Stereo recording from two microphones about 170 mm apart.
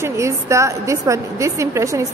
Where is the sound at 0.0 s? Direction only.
15° right (ahead or behind).